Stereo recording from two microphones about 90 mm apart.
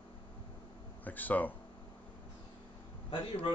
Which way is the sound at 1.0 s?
20° left (ahead or behind).